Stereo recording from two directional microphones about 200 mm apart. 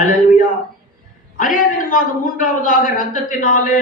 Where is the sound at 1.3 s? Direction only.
40° left (ahead or behind).